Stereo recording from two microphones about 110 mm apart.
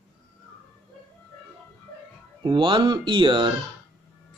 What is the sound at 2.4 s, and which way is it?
Speech, 50° right (ahead or behind).